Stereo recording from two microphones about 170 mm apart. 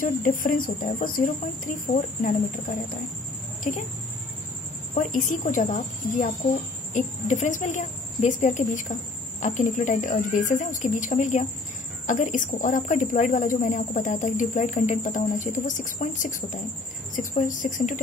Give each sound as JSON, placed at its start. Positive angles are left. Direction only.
{"t": 0.0, "sound": "speech", "side_deg": 55}
{"t": 3.7, "sound": "speech", "side_deg": 45}
{"t": 4.9, "sound": "speech", "side_deg": 50}